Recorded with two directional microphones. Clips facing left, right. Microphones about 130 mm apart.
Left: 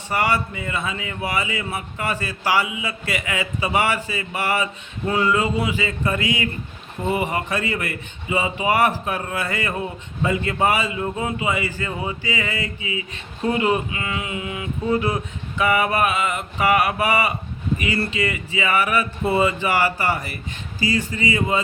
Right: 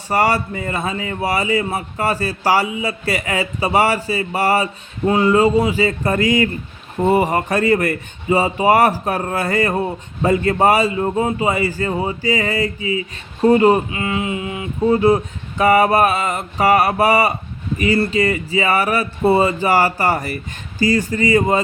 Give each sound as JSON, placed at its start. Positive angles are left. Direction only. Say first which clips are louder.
{"t": 0.1, "sound": "speech", "louder": "right 5 dB", "side_deg": -40}